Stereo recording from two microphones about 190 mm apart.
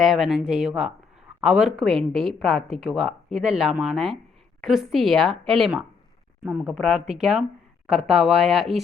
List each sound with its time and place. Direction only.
0.0 s speech: centre (ahead or behind)